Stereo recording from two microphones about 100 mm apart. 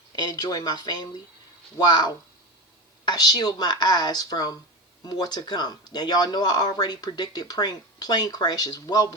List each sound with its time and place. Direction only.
0.2 s speech: 40° left (ahead or behind)